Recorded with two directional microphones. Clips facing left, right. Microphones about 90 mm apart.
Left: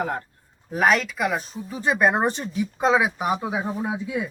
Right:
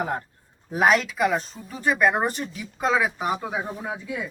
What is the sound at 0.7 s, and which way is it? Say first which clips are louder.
Speech: even; 5° right (ahead or behind).